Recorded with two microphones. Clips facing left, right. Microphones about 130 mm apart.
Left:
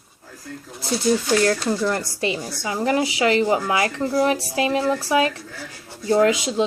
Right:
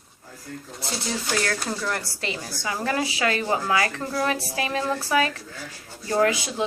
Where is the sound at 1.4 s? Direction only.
25° left (ahead or behind).